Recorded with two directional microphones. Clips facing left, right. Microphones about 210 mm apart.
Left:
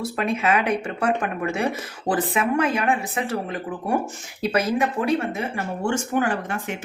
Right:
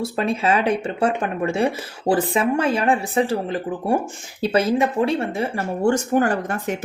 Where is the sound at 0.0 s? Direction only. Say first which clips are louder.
Right 2 dB; 30° right (ahead or behind).